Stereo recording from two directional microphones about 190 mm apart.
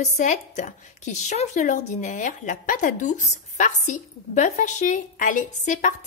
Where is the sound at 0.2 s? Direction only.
40° left (ahead or behind).